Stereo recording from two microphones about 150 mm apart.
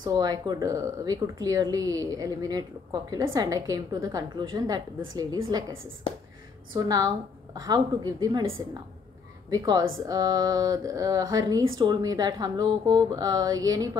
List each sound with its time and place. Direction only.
0.0 s speech: 25° right (ahead or behind)
6.7 s speech: 25° right (ahead or behind)